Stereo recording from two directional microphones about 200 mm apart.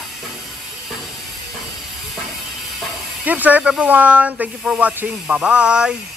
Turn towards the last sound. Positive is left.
turn(degrees=-5)  # may be behind; listen again after turning